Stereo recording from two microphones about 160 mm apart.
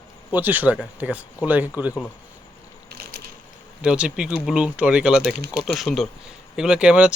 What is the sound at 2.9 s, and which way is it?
Ratchet, 80° right.